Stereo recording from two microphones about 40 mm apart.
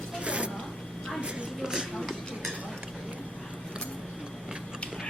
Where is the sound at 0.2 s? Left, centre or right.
Right.